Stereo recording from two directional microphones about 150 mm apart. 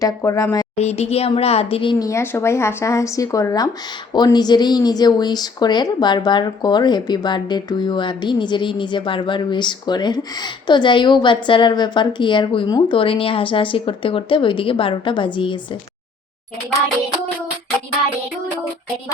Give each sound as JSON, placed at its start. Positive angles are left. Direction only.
{"t": 0.0, "sound": "speech", "side_deg": 20}
{"t": 0.8, "sound": "speech", "side_deg": 45}